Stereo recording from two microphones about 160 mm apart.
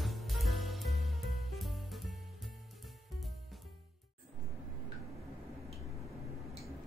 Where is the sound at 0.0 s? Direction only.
Centre (ahead or behind).